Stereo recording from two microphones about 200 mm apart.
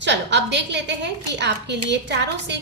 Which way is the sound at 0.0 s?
60° right (ahead or behind).